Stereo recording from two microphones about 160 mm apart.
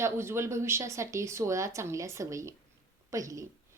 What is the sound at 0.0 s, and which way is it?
A woman's voice, 15° right (ahead or behind).